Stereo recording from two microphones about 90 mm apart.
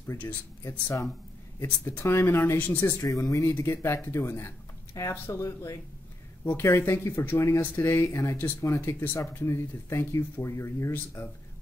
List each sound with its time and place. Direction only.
0.7 s speech: 35° left (ahead or behind)
3.0 s speech: 35° left (ahead or behind)